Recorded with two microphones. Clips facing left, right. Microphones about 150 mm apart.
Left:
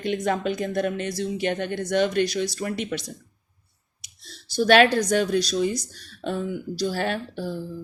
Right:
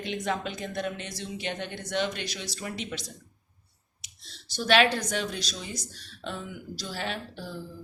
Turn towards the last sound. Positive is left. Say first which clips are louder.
# left 8 dB
turn(degrees=50)  # may be behind; listen again after turning